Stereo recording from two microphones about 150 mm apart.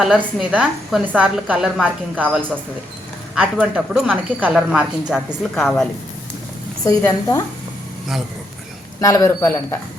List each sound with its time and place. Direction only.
0.0 s a woman's voice: 5° right (ahead or behind)
6.8 s speech: 25° left (ahead or behind)
9.0 s speech: 25° left (ahead or behind)